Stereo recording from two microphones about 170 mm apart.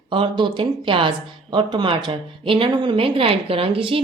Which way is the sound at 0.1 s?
30° right (ahead or behind).